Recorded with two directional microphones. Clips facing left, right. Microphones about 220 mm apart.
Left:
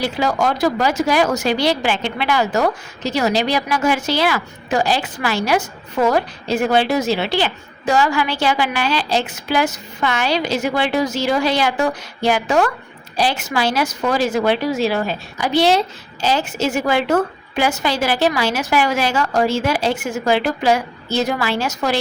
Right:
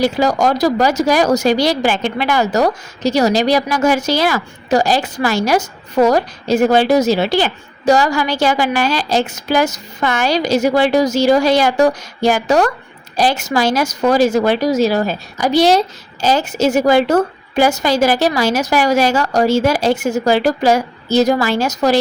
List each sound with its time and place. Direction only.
0.0 s speech: 40° right (ahead or behind)